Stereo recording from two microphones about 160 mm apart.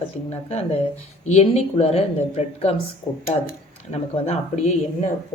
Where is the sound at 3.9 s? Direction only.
40° left (ahead or behind).